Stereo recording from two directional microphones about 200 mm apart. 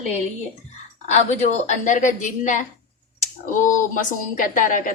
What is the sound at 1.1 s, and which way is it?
A woman's voice, 35° left (ahead or behind).